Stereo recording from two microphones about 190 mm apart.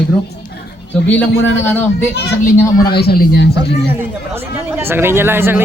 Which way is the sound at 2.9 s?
55° left (ahead or behind).